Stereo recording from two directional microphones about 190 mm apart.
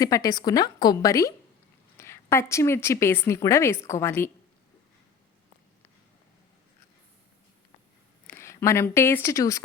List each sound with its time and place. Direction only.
0.0 s a woman's voice: 20° left (ahead or behind)
8.3 s speech: 15° left (ahead or behind)